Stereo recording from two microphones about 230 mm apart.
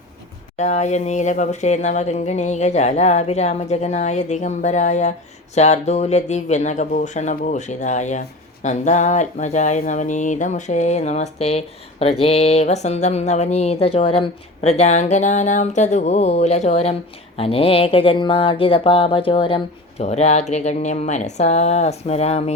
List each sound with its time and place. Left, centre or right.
0.5 s speech: left